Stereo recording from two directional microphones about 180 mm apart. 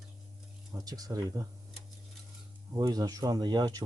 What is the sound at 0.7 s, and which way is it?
Speech, 20° right (ahead or behind).